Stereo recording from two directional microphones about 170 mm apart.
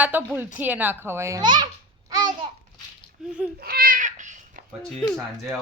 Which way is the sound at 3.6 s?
60° right (ahead or behind).